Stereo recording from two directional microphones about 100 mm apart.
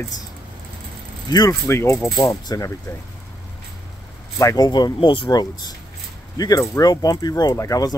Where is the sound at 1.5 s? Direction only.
30° left (ahead or behind).